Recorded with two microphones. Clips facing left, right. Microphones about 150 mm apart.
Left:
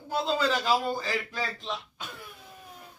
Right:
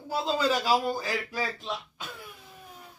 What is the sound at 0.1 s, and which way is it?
A man's voice, 5° right (ahead or behind).